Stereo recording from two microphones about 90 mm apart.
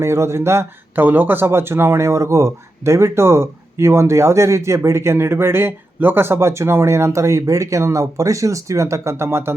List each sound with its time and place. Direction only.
0.0 s speech: 30° right (ahead or behind)